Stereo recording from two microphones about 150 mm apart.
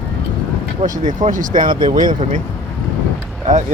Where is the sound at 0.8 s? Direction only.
55° right (ahead or behind).